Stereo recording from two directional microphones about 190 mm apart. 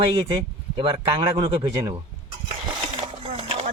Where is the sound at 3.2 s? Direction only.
35° right (ahead or behind).